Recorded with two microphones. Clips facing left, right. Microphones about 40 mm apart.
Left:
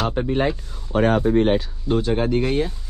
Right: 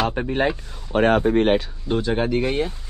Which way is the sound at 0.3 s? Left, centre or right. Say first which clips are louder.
Even; right.